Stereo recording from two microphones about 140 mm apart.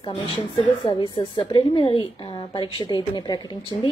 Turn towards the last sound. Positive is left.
turn(degrees=30)  # may be behind; listen again after turning